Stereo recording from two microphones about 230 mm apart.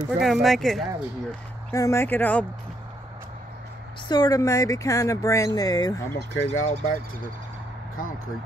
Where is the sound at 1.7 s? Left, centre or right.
Centre.